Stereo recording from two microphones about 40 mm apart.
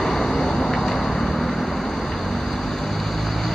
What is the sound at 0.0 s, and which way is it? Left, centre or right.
Vehicle, centre.